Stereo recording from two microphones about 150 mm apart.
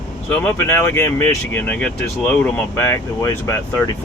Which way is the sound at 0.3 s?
15° left (ahead or behind).